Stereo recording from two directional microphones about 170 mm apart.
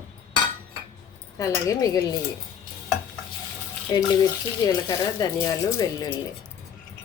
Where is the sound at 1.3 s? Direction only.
20° left (ahead or behind).